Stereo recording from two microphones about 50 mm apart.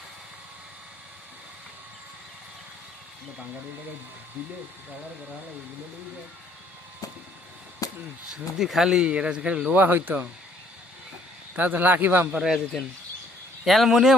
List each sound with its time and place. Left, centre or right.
8.3 s speech: centre
9.0 s a man's voice: right
9.7 s speech: right
11.5 s a man's voice: right
12.4 s a man's voice: centre